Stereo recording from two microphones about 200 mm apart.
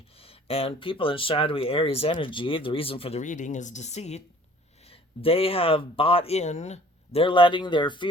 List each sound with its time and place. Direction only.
0.2 s speech: 30° left (ahead or behind)